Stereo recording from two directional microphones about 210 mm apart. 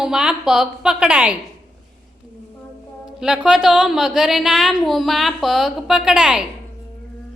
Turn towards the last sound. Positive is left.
turn(degrees=-5)  # may be behind; listen again after turning